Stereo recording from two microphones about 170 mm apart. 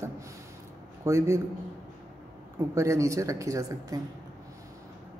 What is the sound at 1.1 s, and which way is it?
Speech, 15° right (ahead or behind).